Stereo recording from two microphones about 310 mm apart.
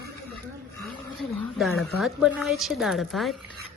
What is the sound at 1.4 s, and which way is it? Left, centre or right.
A woman's voice, centre.